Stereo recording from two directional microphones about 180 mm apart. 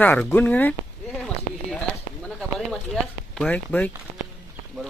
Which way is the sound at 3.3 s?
5° left (ahead or behind).